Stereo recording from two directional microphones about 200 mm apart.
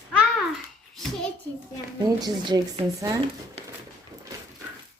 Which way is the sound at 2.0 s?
20° right (ahead or behind).